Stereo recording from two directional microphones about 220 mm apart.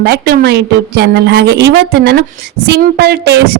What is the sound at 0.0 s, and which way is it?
A woman's voice, 45° right (ahead or behind).